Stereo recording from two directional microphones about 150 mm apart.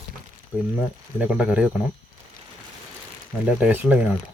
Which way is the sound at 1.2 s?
10° right (ahead or behind).